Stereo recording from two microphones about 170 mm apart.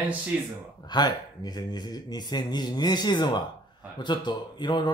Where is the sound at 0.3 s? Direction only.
10° right (ahead or behind).